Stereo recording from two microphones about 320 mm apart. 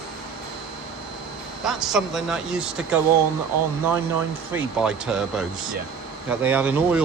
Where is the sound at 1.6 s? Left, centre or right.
Centre.